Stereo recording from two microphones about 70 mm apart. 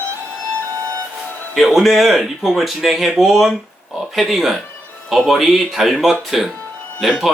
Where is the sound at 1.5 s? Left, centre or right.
Centre.